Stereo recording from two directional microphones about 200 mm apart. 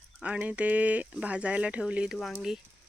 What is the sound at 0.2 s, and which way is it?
Speech, 5° right (ahead or behind).